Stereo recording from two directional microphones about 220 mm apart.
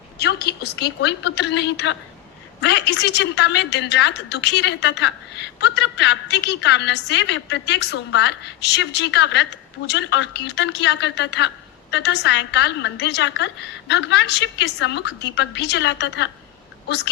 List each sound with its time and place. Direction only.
0.2 s a woman's voice: 45° left (ahead or behind)